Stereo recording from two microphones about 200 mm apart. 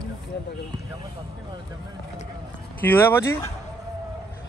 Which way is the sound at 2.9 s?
10° left (ahead or behind).